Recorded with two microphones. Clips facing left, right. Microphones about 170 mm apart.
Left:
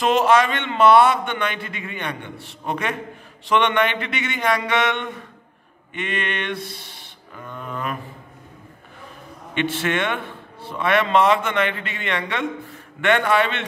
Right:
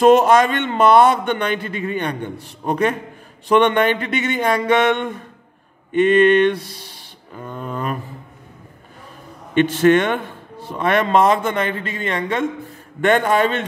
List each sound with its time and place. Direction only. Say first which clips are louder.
0.0 s a man's voice: right 5 dB; 45° right (ahead or behind)
9.5 s a man's voice: right 10 dB; 45° right (ahead or behind)